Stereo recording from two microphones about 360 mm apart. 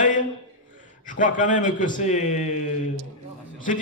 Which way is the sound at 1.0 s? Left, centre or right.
Left.